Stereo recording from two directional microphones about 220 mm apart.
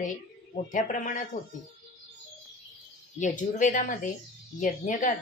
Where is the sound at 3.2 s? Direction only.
35° left (ahead or behind).